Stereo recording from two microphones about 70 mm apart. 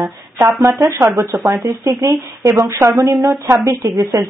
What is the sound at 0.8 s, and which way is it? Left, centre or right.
Speech, right.